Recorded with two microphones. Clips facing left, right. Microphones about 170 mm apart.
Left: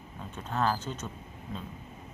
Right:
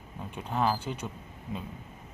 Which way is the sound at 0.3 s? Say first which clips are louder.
Right 1 dB; 15° right (ahead or behind).